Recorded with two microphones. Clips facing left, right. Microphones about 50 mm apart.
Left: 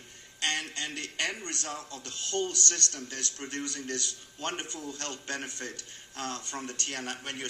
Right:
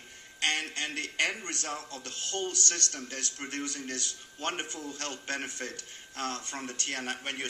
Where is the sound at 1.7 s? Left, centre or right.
Right; by 4.8 s centre.